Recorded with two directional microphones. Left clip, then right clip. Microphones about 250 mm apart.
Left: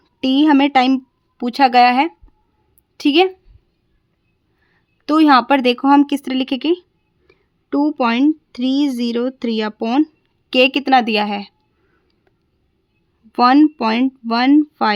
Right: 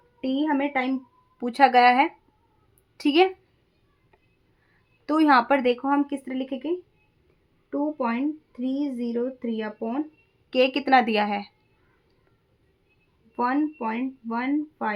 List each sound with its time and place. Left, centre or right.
0.2 s speech: left
1.4 s speech: left
5.0 s speech: left
13.3 s speech: left